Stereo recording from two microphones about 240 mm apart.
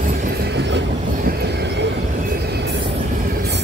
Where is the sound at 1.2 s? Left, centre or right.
Right.